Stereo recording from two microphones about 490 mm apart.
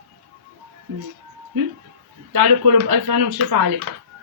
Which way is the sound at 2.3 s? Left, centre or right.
Right.